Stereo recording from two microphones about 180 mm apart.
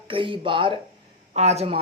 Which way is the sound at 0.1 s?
30° right (ahead or behind).